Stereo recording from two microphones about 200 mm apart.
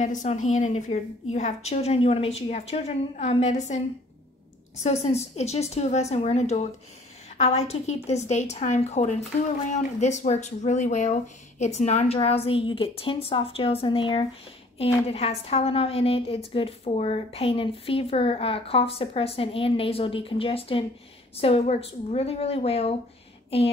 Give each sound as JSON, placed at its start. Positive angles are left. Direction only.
{"t": 0.0, "sound": "a woman's voice", "side_deg": 35}
{"t": 4.8, "sound": "a woman's voice", "side_deg": 30}